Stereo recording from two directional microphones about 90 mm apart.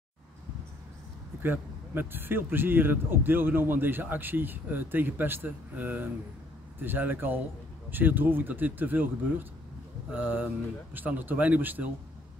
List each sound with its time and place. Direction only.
1.4 s speech: 20° right (ahead or behind)